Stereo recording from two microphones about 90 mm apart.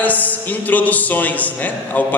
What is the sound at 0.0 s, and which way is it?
A woman's voice, 20° left (ahead or behind).